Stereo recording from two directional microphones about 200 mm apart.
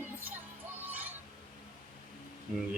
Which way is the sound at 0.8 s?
10° right (ahead or behind).